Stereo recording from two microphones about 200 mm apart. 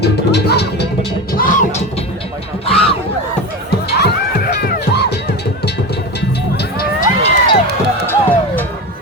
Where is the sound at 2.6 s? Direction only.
30° left (ahead or behind).